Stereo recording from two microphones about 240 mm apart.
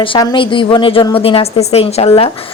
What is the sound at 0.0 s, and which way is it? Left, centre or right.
Speech, centre.